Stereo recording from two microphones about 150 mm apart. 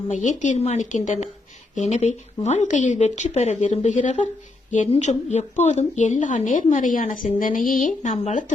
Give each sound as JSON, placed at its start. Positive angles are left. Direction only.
{"t": 0.1, "sound": "speech", "side_deg": 55}